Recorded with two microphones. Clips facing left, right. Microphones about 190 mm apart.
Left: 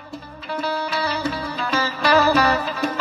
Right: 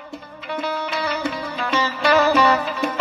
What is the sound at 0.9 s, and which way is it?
Music, 35° left (ahead or behind).